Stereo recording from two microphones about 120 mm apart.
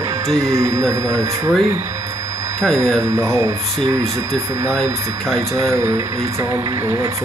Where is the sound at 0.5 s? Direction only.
25° right (ahead or behind).